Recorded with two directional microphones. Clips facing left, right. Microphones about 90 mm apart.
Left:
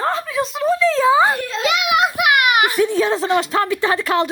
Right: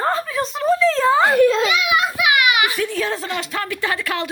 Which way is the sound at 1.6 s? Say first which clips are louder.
Left 2 dB; 70° left (ahead or behind).